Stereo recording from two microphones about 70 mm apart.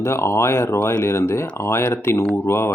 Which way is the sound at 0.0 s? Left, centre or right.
Left.